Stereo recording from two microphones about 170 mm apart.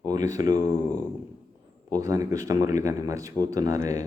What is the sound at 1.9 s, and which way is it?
Speech, 20° right (ahead or behind).